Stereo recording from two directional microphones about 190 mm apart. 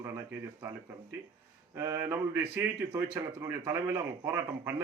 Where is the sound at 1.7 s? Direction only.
15° right (ahead or behind).